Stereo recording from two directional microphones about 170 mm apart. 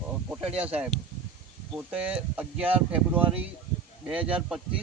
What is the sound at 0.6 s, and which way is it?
Speech, 10° right (ahead or behind).